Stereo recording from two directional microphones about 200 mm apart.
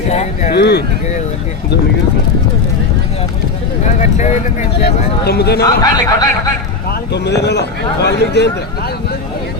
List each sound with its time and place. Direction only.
0.1 s speech: 35° left (ahead or behind)
0.5 s speech: 55° left (ahead or behind)
3.8 s speech: 35° left (ahead or behind)
5.2 s a man's voice: 55° left (ahead or behind)
5.6 s speech: 20° left (ahead or behind)
7.1 s speech: 60° left (ahead or behind)